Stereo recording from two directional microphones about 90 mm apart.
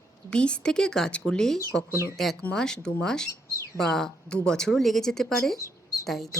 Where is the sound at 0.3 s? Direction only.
10° left (ahead or behind).